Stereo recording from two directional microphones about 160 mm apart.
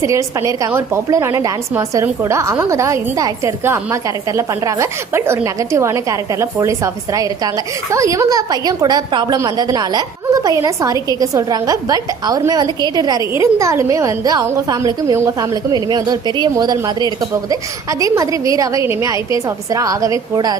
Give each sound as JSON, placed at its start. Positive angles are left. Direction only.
{"t": 0.0, "sound": "a woman's voice", "side_deg": -20}